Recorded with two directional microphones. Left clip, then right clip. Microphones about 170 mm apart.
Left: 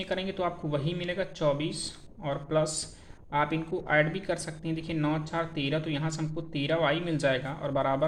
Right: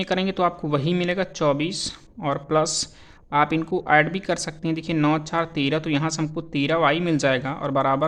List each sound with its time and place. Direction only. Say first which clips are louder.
0.0 s speech: right 9 dB; 50° right (ahead or behind)